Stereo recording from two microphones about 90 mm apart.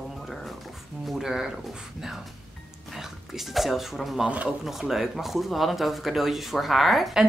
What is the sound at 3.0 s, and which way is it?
Speech, centre (ahead or behind).